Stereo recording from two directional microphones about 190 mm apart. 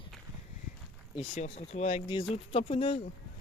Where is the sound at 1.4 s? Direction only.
35° left (ahead or behind).